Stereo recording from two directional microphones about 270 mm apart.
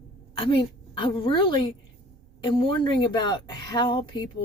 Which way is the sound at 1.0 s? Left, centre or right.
Centre.